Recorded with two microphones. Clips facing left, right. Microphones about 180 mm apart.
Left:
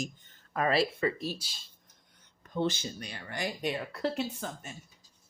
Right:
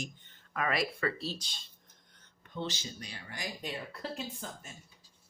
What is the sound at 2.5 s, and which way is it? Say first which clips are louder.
Speech: left 7 dB; 50° left (ahead or behind).